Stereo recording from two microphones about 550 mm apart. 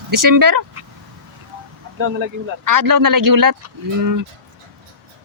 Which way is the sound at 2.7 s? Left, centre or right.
Right.